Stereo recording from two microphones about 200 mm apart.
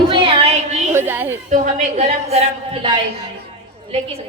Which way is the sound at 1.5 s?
35° right (ahead or behind).